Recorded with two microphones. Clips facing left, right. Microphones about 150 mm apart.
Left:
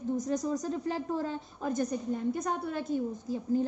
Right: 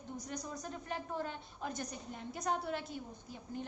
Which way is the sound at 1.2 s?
40° left (ahead or behind).